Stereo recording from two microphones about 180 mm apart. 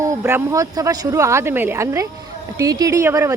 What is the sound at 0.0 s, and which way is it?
A woman's voice, 15° right (ahead or behind).